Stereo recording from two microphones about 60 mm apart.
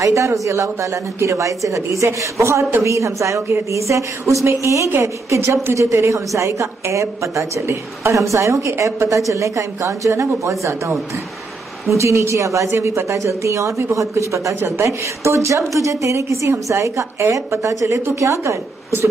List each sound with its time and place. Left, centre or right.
0.0 s a woman's voice: right